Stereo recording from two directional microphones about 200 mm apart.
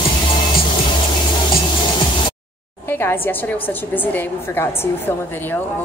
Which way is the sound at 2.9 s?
10° left (ahead or behind).